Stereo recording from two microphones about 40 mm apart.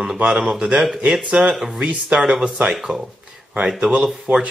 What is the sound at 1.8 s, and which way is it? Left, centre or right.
Speech, right.